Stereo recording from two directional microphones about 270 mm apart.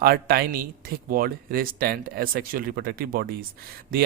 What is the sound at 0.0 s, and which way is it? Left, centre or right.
Speech, right.